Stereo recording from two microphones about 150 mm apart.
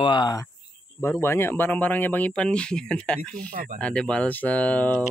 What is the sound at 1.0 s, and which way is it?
Speech, 15° left (ahead or behind).